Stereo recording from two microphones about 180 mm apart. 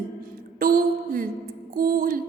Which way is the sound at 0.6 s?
50° right (ahead or behind).